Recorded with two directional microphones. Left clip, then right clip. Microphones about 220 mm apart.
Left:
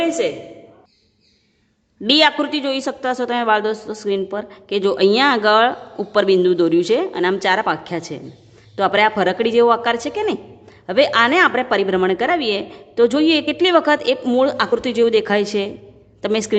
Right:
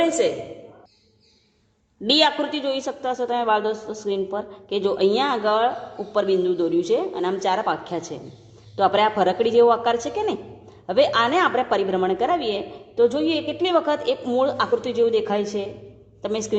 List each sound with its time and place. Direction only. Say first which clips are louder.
0.0 s a woman's voice: left 1 dB; 25° left (ahead or behind)
2.0 s a woman's voice: left 4 dB; 25° left (ahead or behind)